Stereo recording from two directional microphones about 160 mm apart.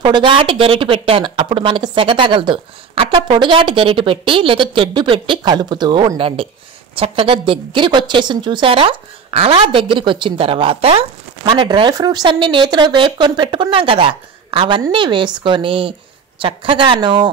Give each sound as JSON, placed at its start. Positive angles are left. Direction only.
{"t": 0.0, "sound": "speech", "side_deg": -30}